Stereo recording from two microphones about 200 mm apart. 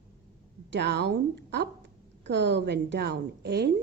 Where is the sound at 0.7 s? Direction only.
60° right (ahead or behind).